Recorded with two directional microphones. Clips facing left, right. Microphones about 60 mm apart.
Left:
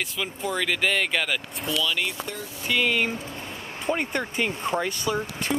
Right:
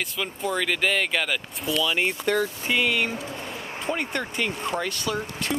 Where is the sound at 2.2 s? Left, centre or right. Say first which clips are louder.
Right 12 dB; right.